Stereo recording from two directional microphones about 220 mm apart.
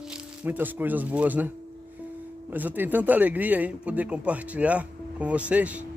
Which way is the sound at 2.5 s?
10° right (ahead or behind).